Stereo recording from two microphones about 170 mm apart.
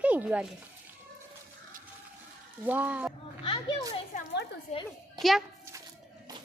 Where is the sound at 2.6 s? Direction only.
10° right (ahead or behind).